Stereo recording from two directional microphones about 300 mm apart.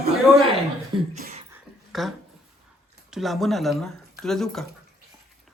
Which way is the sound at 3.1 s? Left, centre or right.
Centre.